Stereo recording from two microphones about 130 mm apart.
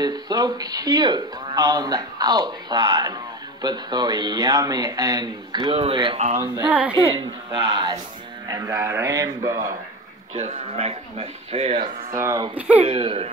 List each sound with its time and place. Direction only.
0.0 s speech: 30° right (ahead or behind)
6.7 s a woman's voice: 10° right (ahead or behind)
7.1 s speech: 35° right (ahead or behind)
8.5 s a man's voice: 25° right (ahead or behind)
10.3 s speech: 60° right (ahead or behind)
12.1 s a man's voice: 25° right (ahead or behind)
12.5 s a woman's voice: 10° right (ahead or behind)
12.8 s speech: 45° right (ahead or behind)